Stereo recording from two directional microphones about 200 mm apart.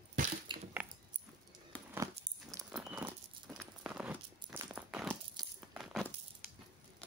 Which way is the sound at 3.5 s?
Centre (ahead or behind).